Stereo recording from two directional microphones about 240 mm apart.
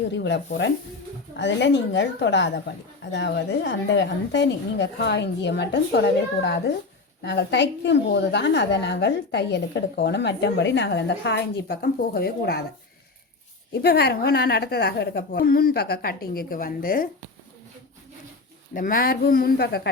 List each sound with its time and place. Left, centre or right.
0.1 s a woman's voice: left
13.8 s a woman's voice: left
18.7 s a woman's voice: left